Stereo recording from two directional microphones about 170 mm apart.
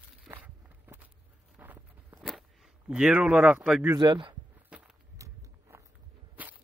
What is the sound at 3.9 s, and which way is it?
Speech, 25° right (ahead or behind).